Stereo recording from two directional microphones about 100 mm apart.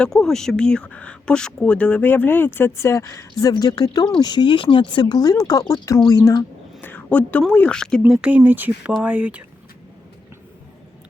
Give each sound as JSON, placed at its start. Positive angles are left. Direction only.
{"t": 0.0, "sound": "speech", "side_deg": 5}
{"t": 6.8, "sound": "a sound", "side_deg": 15}
{"t": 7.5, "sound": "speech", "side_deg": 10}
{"t": 8.1, "sound": "speech", "side_deg": -10}